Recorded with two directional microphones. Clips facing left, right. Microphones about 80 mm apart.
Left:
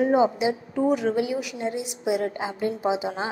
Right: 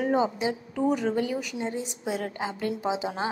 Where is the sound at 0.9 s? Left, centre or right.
Centre.